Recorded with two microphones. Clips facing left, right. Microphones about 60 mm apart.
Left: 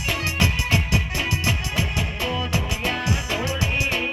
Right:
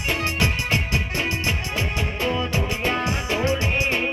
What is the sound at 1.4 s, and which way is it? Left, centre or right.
Music, right.